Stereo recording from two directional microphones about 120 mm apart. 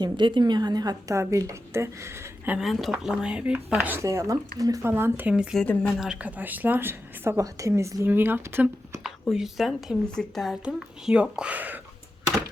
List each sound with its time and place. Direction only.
0.0 s a woman's voice: 40° right (ahead or behind); by 2.6 s 20° right (ahead or behind)
2.6 s speech: centre (ahead or behind)
3.9 s a woman's voice: 25° right (ahead or behind); by 5.5 s 5° right (ahead or behind)
5.5 s speech: 10° left (ahead or behind)
6.0 s speech: 10° right (ahead or behind)
9.3 s a woman's voice: 5° right (ahead or behind)